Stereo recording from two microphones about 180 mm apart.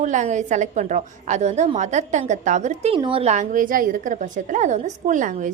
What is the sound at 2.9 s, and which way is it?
A woman's voice, 30° right (ahead or behind).